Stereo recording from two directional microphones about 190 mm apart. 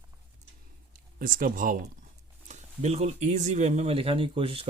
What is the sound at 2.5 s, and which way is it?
Speech, 35° right (ahead or behind).